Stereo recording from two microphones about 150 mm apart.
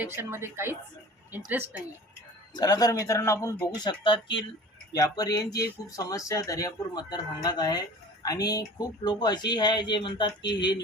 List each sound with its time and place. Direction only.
0.0 s a woman's voice: 15° right (ahead or behind)
2.6 s speech: 25° left (ahead or behind)